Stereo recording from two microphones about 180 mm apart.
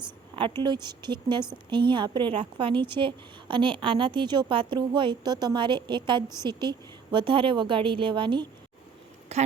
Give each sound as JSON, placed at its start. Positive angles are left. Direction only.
{"t": 0.6, "sound": "a woman's voice", "side_deg": -25}
{"t": 9.3, "sound": "speech", "side_deg": -35}